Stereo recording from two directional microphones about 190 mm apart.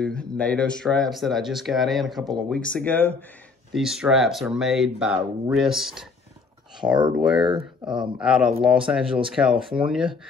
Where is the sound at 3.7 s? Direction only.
5° right (ahead or behind).